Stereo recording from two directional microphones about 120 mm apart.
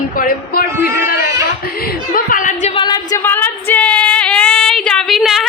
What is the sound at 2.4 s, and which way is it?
Speech, 90° left.